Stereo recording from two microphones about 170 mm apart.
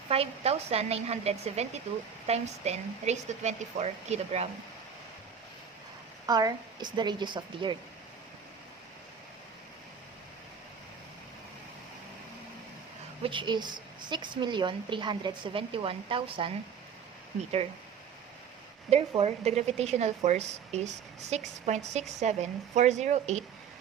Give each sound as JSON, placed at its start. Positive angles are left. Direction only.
{"t": 0.1, "sound": "a woman's voice", "side_deg": -35}
{"t": 6.2, "sound": "a woman's voice", "side_deg": -25}
{"t": 13.2, "sound": "a woman's voice", "side_deg": -30}
{"t": 18.9, "sound": "a woman's voice", "side_deg": -35}